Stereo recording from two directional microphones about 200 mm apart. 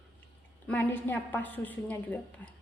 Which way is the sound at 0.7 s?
10° left (ahead or behind).